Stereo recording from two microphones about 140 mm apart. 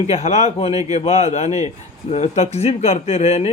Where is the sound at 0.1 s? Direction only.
50° left (ahead or behind).